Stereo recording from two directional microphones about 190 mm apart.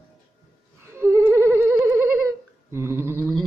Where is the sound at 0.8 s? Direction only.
15° right (ahead or behind).